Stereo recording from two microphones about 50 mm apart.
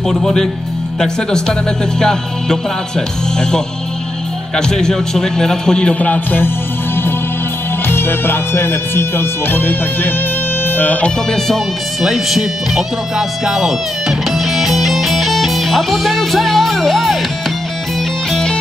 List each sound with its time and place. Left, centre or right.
0.2 s a man's voice: centre
4.6 s a man's voice: centre
5.9 s music: left
7.9 s speech: left
12.0 s speech: centre
13.5 s music: centre
18.3 s music: centre